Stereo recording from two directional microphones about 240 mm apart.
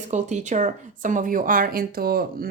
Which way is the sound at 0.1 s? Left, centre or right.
Right.